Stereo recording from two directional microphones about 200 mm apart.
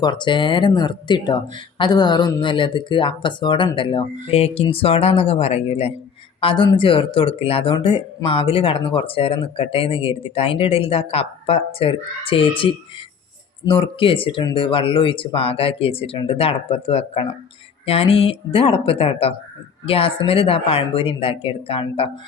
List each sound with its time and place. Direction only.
0.0 s speech: 20° left (ahead or behind)
13.7 s speech: 25° left (ahead or behind)